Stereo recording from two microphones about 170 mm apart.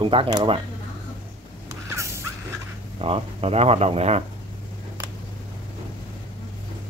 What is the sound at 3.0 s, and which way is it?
Speech, 35° right (ahead or behind).